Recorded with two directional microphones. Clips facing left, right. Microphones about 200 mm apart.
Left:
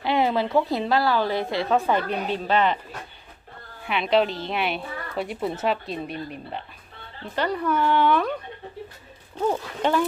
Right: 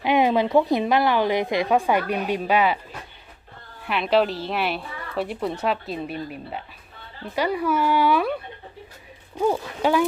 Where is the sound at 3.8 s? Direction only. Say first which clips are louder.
Right 1 dB; centre (ahead or behind).